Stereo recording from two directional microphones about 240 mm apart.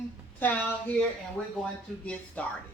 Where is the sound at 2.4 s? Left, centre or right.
Centre.